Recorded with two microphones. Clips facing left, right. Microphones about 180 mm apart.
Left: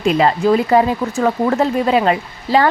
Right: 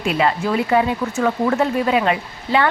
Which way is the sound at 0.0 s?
35° left (ahead or behind).